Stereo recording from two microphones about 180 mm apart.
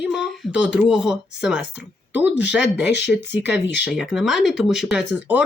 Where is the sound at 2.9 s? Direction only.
70° left (ahead or behind).